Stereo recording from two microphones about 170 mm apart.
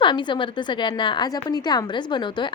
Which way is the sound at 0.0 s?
25° left (ahead or behind).